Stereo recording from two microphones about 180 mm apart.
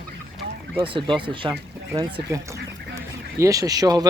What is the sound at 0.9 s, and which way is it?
Speech, 30° right (ahead or behind).